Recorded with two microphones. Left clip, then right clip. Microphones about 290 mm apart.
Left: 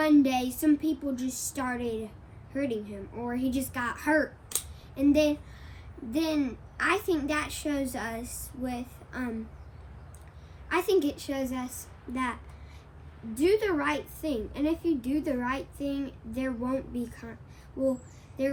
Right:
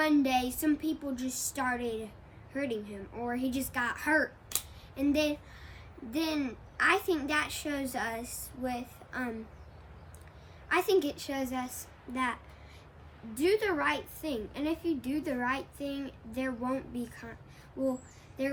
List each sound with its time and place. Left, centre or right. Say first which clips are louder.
0.0 s a woman's voice: left 3 dB; centre
10.7 s a woman's voice: left 2 dB; centre